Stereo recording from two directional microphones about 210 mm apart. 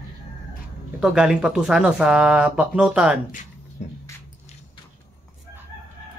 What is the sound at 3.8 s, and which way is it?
Music, 35° left (ahead or behind).